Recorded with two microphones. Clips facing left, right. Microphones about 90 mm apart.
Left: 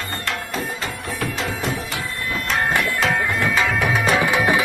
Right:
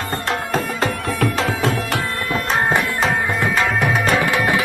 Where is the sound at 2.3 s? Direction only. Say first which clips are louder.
Right 3 dB; 40° right (ahead or behind).